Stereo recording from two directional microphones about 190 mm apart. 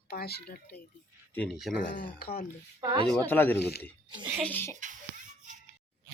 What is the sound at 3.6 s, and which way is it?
Speech, 60° left (ahead or behind).